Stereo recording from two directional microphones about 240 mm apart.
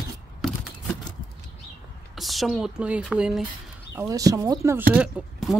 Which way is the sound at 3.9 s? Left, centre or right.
Centre.